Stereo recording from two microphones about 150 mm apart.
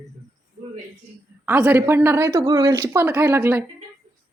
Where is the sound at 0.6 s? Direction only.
40° right (ahead or behind).